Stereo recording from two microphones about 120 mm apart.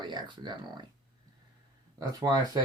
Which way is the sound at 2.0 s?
35° right (ahead or behind).